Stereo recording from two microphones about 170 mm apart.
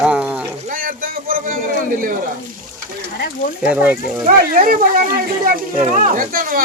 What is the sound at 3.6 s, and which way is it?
Speech, 10° right (ahead or behind).